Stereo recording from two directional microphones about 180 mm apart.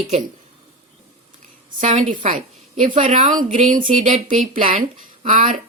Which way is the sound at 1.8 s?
40° right (ahead or behind).